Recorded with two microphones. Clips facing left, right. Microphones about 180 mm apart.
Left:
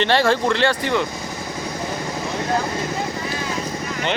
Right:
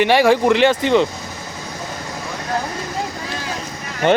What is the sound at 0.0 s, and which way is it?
Speech, 10° right (ahead or behind).